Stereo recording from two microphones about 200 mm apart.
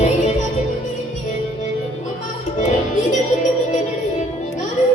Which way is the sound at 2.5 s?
35° left (ahead or behind).